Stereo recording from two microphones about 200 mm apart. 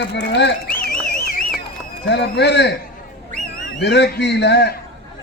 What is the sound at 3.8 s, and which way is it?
Speech, 60° left (ahead or behind).